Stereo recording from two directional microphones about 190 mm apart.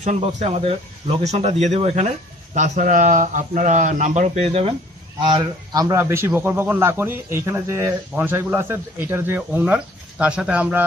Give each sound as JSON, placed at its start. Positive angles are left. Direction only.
{"t": 0.0, "sound": "speech", "side_deg": -35}
{"t": 5.2, "sound": "a man's voice", "side_deg": -20}